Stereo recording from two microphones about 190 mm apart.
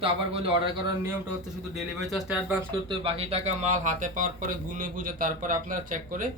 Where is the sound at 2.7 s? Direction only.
25° right (ahead or behind).